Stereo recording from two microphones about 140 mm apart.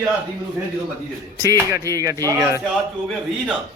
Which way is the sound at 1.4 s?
25° right (ahead or behind).